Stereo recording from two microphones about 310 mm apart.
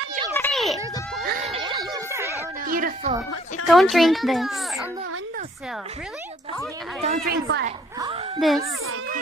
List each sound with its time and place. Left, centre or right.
0.3 s children playing: centre
1.2 s a sound: right; by 2.4 s centre
2.6 s music: right
3.6 s a child's voice: centre
7.0 s a woman's voice: right
8.4 s a child's voice: centre